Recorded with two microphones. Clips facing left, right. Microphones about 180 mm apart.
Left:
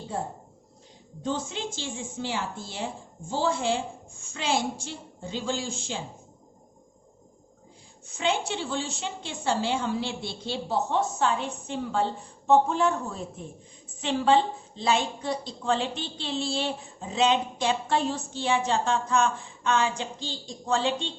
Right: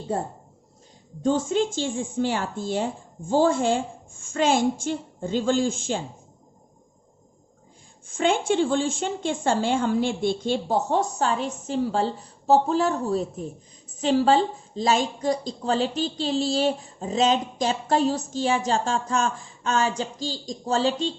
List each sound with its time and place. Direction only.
1.2 s a woman's voice: 50° right (ahead or behind)
8.0 s a woman's voice: 50° right (ahead or behind)